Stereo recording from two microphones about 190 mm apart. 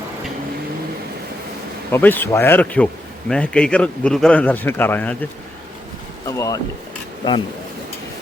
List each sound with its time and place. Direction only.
1.9 s a man's voice: 10° left (ahead or behind)
6.2 s a man's voice: 15° left (ahead or behind)